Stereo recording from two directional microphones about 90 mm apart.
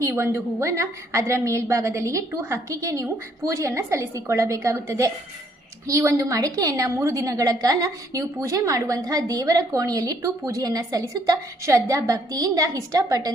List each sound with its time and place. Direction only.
0.1 s a woman's voice: 30° right (ahead or behind); by 13.3 s 45° right (ahead or behind)